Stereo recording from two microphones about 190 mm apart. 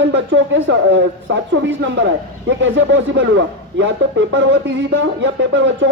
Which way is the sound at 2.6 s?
85° right.